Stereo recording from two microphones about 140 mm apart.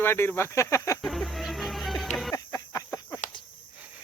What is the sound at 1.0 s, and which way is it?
Music, centre (ahead or behind).